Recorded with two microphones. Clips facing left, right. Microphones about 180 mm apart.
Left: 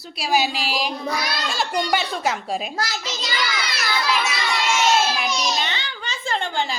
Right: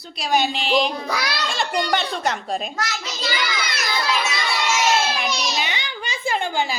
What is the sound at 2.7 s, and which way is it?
Speech, 35° left (ahead or behind).